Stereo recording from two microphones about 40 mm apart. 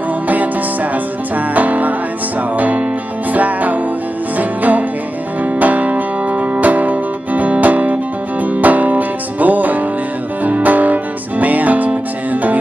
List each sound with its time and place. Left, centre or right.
1.5 s music: right